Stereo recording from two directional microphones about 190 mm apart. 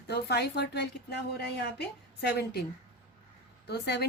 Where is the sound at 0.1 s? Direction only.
60° left (ahead or behind).